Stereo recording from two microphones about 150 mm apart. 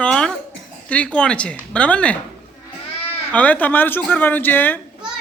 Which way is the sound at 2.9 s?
40° left (ahead or behind).